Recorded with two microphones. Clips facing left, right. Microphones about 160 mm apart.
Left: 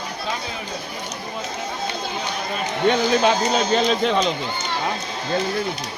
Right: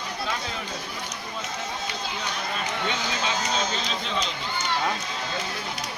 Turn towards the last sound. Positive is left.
turn(degrees=60)  # may be behind; listen again after turning